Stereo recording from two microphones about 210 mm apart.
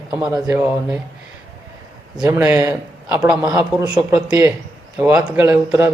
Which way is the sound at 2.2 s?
10° right (ahead or behind).